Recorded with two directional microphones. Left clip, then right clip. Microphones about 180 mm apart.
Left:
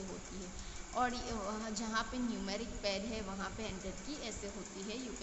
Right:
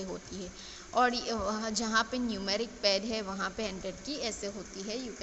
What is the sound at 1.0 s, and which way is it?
A woman's voice, 35° right (ahead or behind).